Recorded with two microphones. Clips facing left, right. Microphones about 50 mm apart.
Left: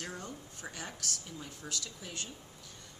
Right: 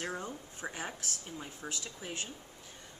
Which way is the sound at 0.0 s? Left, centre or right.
Centre.